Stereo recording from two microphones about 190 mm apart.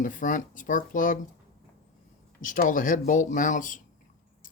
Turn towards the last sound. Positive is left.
turn(degrees=45)  # may be behind; listen again after turning